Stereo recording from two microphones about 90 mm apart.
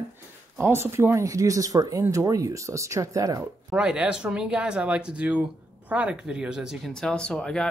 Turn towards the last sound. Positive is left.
turn(degrees=10)  # may be behind; listen again after turning